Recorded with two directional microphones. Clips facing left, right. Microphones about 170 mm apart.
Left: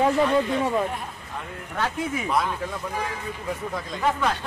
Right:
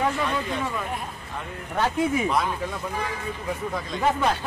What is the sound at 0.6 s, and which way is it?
Speech, 30° left (ahead or behind).